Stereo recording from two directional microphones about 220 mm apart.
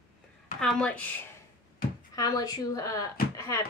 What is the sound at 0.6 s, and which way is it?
Speech, 5° left (ahead or behind).